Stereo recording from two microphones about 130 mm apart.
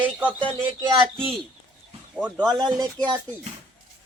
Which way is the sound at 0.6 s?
35° right (ahead or behind).